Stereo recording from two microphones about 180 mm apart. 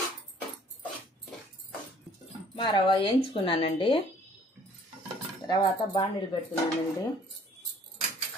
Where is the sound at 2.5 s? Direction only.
30° left (ahead or behind).